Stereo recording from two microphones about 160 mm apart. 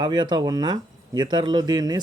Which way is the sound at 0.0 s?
30° right (ahead or behind).